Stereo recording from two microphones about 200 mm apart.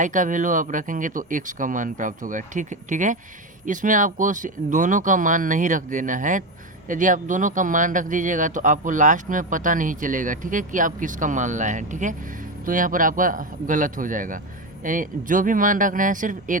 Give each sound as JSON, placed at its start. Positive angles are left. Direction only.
{"t": 0.0, "sound": "speech", "side_deg": -40}